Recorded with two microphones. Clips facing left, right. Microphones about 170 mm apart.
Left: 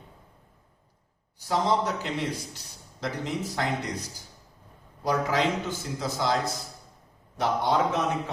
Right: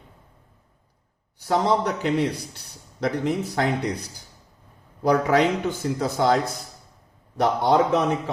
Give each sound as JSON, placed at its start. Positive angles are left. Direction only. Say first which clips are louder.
{"t": 1.4, "sound": "a man's voice", "louder": "right 4 dB", "side_deg": -60}